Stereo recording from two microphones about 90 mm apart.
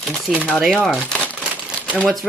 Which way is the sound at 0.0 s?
Centre (ahead or behind).